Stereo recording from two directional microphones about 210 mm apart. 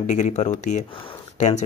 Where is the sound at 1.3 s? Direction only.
35° left (ahead or behind).